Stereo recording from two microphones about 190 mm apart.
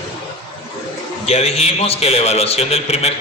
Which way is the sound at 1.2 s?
35° left (ahead or behind).